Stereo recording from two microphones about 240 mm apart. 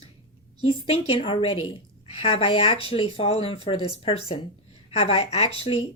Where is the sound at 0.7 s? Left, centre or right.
Left.